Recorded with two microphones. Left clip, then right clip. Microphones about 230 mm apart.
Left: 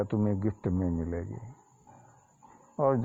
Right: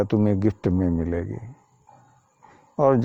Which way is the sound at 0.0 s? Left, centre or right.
Right.